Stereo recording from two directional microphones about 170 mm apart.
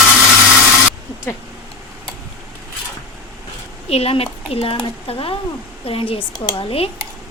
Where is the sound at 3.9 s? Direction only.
35° left (ahead or behind).